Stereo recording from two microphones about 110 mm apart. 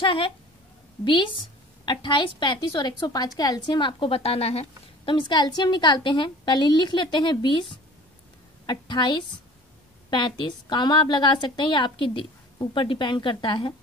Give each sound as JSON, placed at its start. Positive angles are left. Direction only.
{"t": 0.0, "sound": "a woman's voice", "side_deg": 55}
{"t": 5.3, "sound": "a woman's voice", "side_deg": 40}